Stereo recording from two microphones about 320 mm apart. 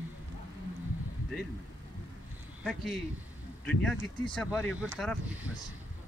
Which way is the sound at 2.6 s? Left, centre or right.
Centre.